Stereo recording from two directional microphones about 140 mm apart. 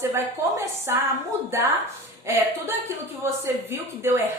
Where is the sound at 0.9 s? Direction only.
20° right (ahead or behind).